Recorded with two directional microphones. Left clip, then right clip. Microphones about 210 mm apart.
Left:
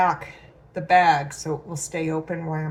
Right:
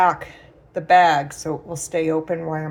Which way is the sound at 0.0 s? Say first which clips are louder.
Right 4 dB; 50° right (ahead or behind).